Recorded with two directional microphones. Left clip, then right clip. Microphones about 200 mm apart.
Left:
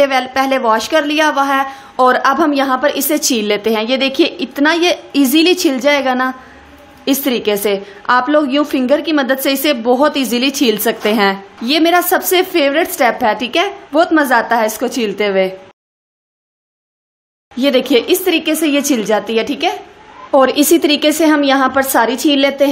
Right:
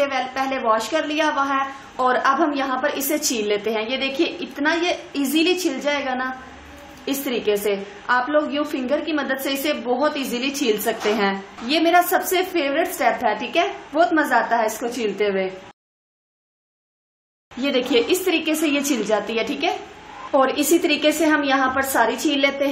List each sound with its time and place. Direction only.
0.0 s a woman's voice: 45° left (ahead or behind)
17.6 s a woman's voice: 50° left (ahead or behind)
20.3 s a woman's voice: 50° left (ahead or behind)